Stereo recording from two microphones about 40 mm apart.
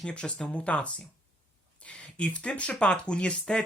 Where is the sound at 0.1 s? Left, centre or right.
Left.